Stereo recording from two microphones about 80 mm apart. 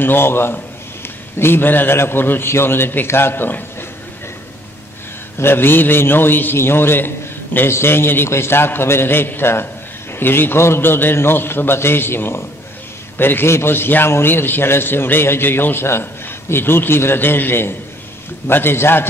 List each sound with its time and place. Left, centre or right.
0.0 s a man's voice: left
5.4 s a man's voice: left